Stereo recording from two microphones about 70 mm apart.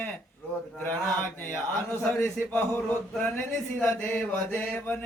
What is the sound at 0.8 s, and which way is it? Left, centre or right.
Mantra, left.